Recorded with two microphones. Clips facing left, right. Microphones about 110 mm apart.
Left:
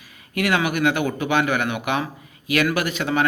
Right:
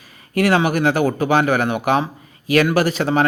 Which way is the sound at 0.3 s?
35° right (ahead or behind).